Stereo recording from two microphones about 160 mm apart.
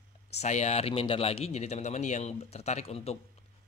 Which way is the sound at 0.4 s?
45° left (ahead or behind).